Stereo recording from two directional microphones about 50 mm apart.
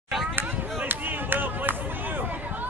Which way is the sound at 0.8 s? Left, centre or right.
Right.